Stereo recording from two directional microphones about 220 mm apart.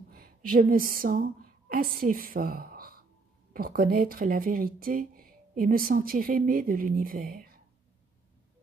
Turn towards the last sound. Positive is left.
turn(degrees=-40)  # may be behind; listen again after turning